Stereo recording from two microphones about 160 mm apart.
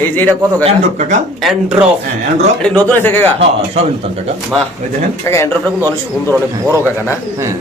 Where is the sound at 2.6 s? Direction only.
10° left (ahead or behind).